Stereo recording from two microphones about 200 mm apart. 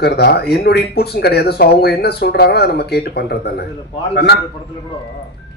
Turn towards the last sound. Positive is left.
turn(degrees=60)  # may be behind; listen again after turning